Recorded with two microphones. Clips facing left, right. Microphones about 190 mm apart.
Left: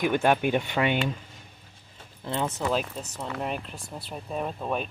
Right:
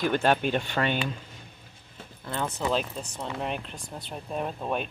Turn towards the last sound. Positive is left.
turn(degrees=0)  # may be behind; listen again after turning